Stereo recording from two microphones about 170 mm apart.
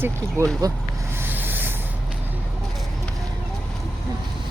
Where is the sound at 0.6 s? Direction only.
20° right (ahead or behind).